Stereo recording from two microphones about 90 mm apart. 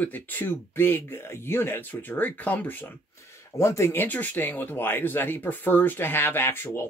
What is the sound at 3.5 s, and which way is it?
Speech, 30° left (ahead or behind).